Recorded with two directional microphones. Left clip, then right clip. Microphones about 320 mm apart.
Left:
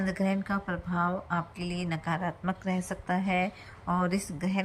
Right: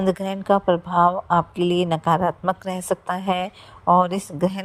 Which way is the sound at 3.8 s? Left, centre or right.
Right.